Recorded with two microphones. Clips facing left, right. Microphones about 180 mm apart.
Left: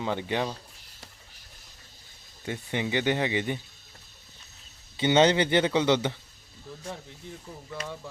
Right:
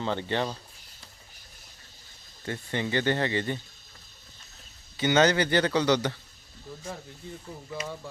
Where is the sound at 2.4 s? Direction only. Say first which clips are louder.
Even; 15° left (ahead or behind).